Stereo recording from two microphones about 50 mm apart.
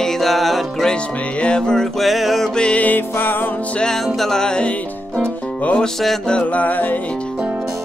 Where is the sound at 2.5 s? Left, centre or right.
Left.